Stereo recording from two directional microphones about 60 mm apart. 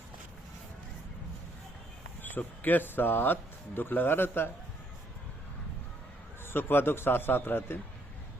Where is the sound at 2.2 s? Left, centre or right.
Left.